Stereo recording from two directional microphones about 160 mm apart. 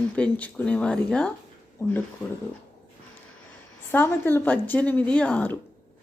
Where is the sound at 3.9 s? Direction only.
15° left (ahead or behind).